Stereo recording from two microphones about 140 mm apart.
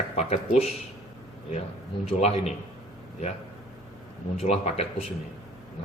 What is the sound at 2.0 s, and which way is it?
Speech, 50° left (ahead or behind).